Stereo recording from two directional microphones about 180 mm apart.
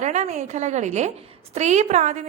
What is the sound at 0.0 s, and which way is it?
A woman's voice, 40° right (ahead or behind).